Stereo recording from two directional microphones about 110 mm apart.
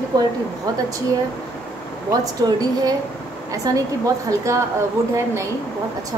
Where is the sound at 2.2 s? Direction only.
35° right (ahead or behind).